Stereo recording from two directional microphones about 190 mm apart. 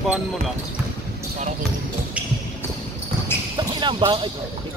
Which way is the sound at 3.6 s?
25° right (ahead or behind).